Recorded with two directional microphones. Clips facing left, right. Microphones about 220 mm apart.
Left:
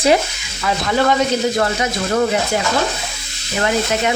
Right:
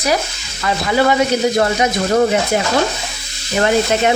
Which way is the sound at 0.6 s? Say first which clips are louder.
Right 2 dB; 5° right (ahead or behind).